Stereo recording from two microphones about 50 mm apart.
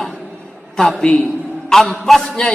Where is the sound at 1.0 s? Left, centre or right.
Left.